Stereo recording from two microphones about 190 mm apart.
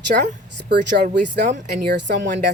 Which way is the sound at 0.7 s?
65° right (ahead or behind).